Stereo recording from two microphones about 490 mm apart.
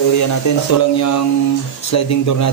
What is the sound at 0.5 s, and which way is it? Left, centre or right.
Speech, left.